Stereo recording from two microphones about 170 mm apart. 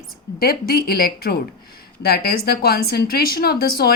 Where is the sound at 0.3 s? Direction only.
60° left (ahead or behind).